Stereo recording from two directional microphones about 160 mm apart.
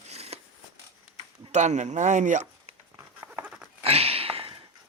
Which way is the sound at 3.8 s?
40° right (ahead or behind).